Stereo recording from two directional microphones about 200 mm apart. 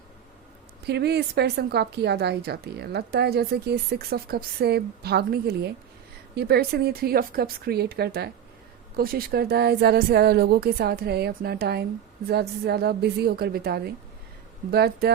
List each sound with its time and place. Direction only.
0.9 s a woman's voice: 55° right (ahead or behind)